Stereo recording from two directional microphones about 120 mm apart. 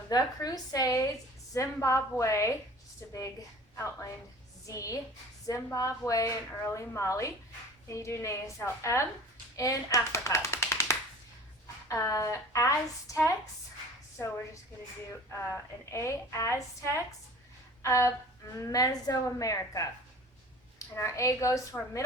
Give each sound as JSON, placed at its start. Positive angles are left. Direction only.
{"t": 0.1, "sound": "a woman's voice", "side_deg": 35}
{"t": 3.8, "sound": "a woman's voice", "side_deg": 25}
{"t": 15.3, "sound": "a woman's voice", "side_deg": 20}